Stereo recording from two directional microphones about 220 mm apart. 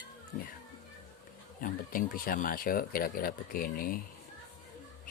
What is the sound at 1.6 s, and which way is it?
Speech, 40° left (ahead or behind).